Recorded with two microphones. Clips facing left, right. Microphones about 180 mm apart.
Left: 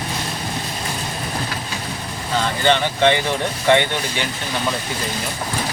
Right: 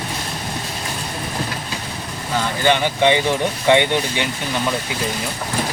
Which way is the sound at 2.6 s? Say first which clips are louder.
Right 1 dB; 15° right (ahead or behind).